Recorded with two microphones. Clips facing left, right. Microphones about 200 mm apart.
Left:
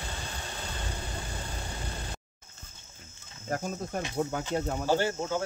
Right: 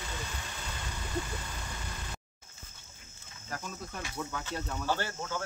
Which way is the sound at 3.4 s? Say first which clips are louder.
Left 8 dB; 50° left (ahead or behind).